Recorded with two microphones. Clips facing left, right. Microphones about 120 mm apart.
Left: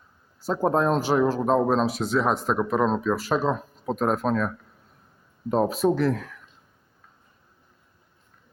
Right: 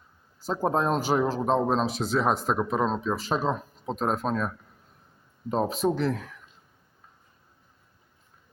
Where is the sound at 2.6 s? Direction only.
5° left (ahead or behind).